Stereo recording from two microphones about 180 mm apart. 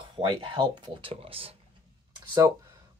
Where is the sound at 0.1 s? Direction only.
30° right (ahead or behind).